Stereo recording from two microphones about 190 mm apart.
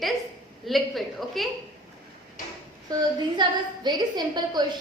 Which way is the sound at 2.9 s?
20° right (ahead or behind).